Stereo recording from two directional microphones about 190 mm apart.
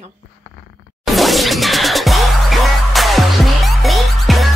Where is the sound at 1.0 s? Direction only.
Centre (ahead or behind).